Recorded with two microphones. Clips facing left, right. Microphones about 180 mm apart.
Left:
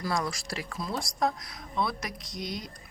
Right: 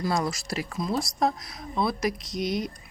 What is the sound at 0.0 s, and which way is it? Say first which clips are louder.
Speech: right 4 dB; 25° right (ahead or behind).